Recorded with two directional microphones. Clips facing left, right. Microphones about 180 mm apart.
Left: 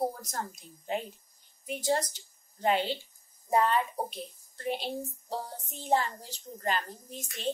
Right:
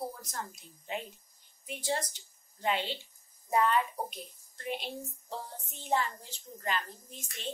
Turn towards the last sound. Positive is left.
turn(degrees=35)  # may be behind; listen again after turning